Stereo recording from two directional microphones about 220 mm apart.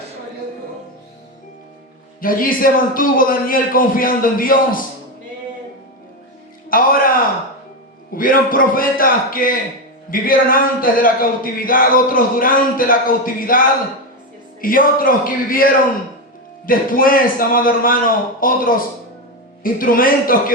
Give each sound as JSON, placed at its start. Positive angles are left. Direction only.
{"t": 2.2, "sound": "speech", "side_deg": 40}
{"t": 6.7, "sound": "music", "side_deg": 40}
{"t": 8.1, "sound": "speech", "side_deg": 40}